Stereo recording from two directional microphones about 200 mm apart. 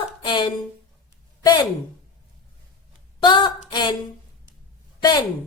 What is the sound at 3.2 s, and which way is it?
Speech, 20° left (ahead or behind).